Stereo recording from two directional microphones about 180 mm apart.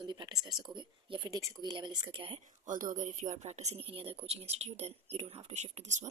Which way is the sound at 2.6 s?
45° right (ahead or behind).